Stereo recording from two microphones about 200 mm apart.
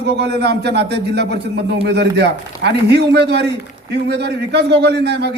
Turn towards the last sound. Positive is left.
turn(degrees=-55)  # may be behind; listen again after turning